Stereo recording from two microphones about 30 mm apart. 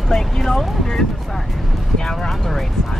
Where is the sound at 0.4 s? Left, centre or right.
Centre.